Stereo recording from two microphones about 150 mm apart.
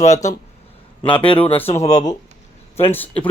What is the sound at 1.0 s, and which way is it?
Speech, 35° left (ahead or behind).